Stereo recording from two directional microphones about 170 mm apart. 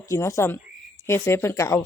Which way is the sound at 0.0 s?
20° left (ahead or behind).